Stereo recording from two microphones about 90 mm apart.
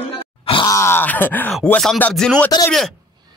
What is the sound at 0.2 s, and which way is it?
Grunt, 80° left.